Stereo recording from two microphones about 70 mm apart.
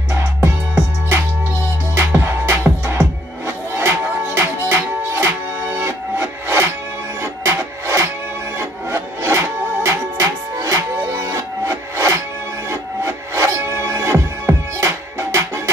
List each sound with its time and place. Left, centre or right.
0.1 s music: right